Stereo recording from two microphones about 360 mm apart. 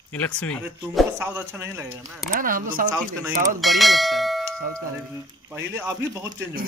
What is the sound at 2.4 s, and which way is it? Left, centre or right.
Speech, right.